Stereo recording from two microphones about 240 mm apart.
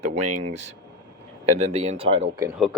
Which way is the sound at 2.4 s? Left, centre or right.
Centre.